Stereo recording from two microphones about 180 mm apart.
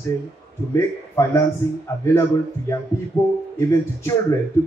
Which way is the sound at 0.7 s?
15° left (ahead or behind).